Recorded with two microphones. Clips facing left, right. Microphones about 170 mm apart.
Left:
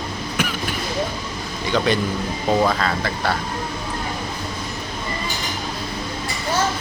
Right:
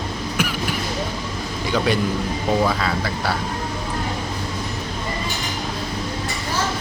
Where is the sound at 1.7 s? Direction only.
5° right (ahead or behind).